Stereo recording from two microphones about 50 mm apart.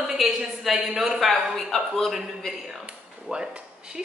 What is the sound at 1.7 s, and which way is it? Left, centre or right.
Speech, centre.